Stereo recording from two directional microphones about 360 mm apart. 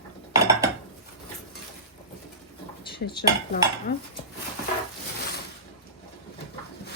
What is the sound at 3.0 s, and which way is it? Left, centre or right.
Speech, left.